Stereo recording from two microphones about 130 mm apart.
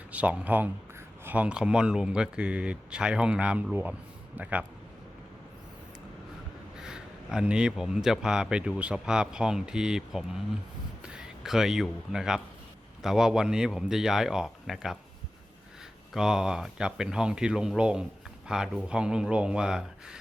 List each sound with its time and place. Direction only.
0.1 s speech: 10° right (ahead or behind)
6.8 s speech: 5° right (ahead or behind)
16.1 s speech: 5° right (ahead or behind)